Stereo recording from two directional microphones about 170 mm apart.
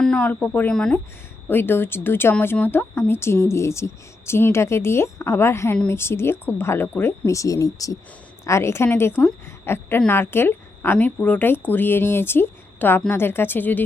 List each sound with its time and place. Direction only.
0.0 s a woman's voice: 5° left (ahead or behind)